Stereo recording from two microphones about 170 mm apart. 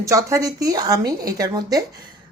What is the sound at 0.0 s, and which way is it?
A woman's voice, 20° right (ahead or behind).